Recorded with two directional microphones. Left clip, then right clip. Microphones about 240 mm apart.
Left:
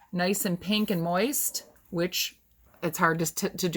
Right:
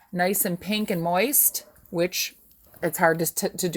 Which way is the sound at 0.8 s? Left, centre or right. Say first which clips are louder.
Right 2 dB; right.